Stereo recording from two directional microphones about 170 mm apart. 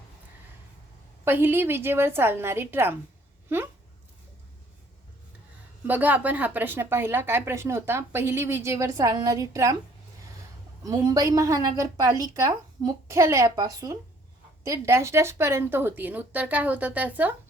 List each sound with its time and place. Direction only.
1.2 s speech: 15° right (ahead or behind)
5.9 s speech: 10° right (ahead or behind)
10.8 s a woman's voice: 20° right (ahead or behind)